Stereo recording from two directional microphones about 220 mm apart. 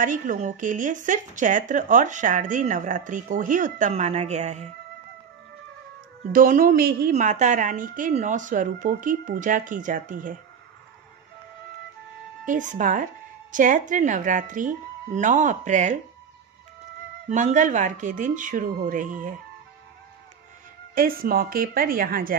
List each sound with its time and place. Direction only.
0.0 s speech: 35° right (ahead or behind)
6.3 s speech: 40° right (ahead or behind)
12.4 s speech: 35° right (ahead or behind)
17.3 s speech: 35° right (ahead or behind)
20.9 s speech: 40° right (ahead or behind)